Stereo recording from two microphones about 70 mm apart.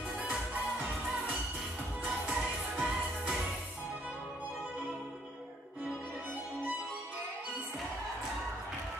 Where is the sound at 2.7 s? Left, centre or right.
Centre.